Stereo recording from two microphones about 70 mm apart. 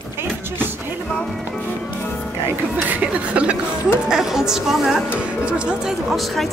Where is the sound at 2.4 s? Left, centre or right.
Right.